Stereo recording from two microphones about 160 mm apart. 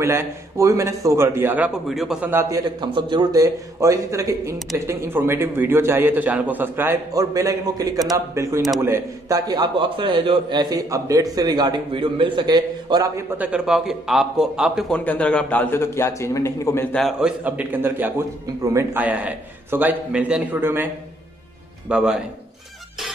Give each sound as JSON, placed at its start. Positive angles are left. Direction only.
{"t": 0.0, "sound": "a man's voice", "side_deg": -15}
{"t": 2.8, "sound": "a man's voice", "side_deg": -30}
{"t": 13.4, "sound": "a man's voice", "side_deg": -5}
{"t": 17.0, "sound": "a man's voice", "side_deg": -5}